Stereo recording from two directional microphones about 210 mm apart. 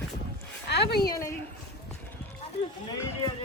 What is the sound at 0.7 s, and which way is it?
Speech, 50° left (ahead or behind).